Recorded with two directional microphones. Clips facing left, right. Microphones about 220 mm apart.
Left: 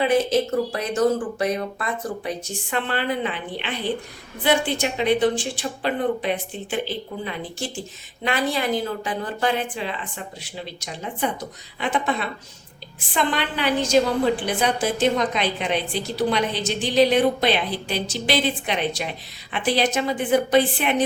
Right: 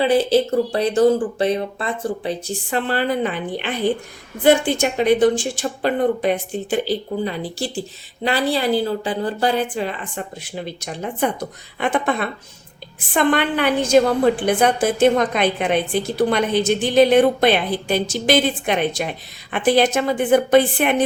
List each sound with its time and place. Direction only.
0.0 s a woman's voice: 30° right (ahead or behind); by 20.9 s 55° right (ahead or behind)